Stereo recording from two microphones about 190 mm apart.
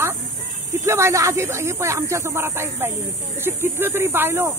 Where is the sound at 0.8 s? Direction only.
15° right (ahead or behind).